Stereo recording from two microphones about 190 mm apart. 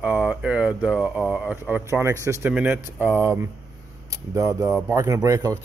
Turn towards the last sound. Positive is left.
turn(degrees=-15)  # may be behind; listen again after turning